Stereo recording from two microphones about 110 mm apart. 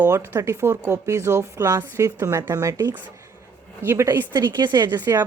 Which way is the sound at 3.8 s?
20° right (ahead or behind).